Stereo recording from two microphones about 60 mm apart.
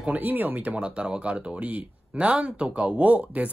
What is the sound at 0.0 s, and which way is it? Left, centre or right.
Speech, right.